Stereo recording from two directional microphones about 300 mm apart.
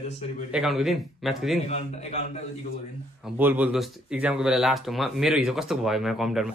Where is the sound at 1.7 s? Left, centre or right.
Left.